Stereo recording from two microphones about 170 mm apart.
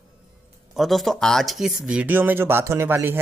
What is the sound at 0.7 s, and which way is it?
Speech, centre (ahead or behind).